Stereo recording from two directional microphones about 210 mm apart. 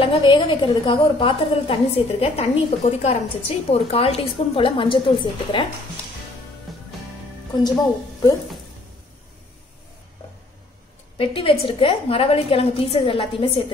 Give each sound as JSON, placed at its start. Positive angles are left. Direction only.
{"t": 0.0, "sound": "a woman's voice", "side_deg": 25}
{"t": 6.7, "sound": "music", "side_deg": 0}
{"t": 11.1, "sound": "a woman's voice", "side_deg": 25}